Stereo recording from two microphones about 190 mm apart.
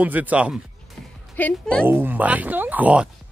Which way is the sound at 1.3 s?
5° left (ahead or behind).